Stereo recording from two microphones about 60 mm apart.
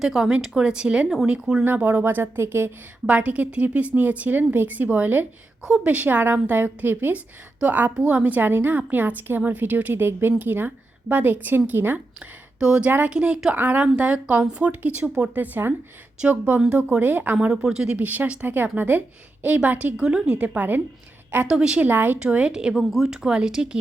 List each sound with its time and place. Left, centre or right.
0.0 s speech: centre
1.6 s a woman's voice: right
3.1 s a woman's voice: right
12.5 s a woman's voice: centre
15.4 s a woman's voice: right
17.0 s a woman's voice: right
17.5 s speech: centre
17.9 s a woman's voice: right
20.0 s a woman's voice: centre
21.4 s speech: centre
21.8 s a woman's voice: right
22.2 s speech: centre